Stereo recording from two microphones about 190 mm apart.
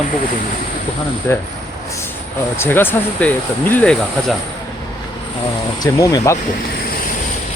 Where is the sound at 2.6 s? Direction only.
10° left (ahead or behind).